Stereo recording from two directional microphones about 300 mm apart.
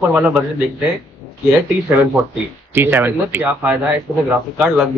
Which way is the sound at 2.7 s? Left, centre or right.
Centre.